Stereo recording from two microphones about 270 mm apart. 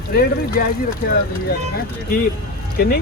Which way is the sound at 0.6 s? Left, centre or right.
Left.